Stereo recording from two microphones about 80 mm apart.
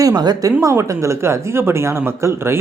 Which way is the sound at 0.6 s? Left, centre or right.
Right.